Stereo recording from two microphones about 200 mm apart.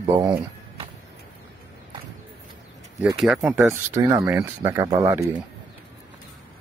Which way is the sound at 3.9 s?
15° right (ahead or behind).